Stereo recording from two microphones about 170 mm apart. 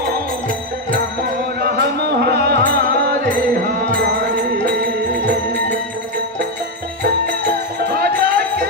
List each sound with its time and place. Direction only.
1.6 s music: 75° right (ahead or behind); by 5.2 s 55° right (ahead or behind)
5.2 s music: 80° right
7.0 s music: 60° right (ahead or behind)